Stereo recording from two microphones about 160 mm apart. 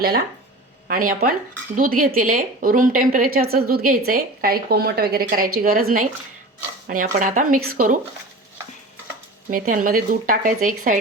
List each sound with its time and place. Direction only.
0.9 s a woman's voice: 60° right (ahead or behind)
9.5 s a woman's voice: 55° right (ahead or behind)